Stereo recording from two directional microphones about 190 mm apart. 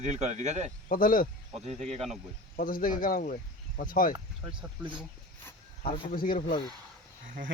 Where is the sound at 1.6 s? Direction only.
35° right (ahead or behind).